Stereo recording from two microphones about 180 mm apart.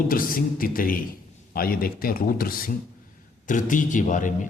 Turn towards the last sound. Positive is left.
turn(degrees=45)  # may be behind; listen again after turning